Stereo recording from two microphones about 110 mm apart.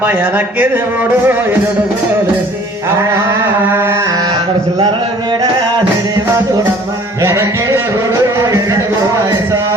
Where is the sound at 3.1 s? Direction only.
20° right (ahead or behind).